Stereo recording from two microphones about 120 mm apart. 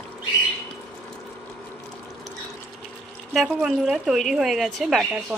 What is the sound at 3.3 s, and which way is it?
Speech, centre (ahead or behind).